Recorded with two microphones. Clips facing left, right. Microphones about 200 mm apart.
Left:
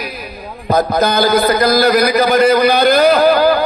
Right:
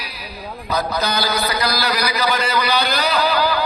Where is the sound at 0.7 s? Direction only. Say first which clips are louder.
Left 8 dB; 50° left (ahead or behind).